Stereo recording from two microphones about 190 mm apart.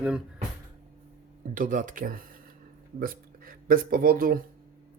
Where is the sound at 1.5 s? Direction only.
45° right (ahead or behind).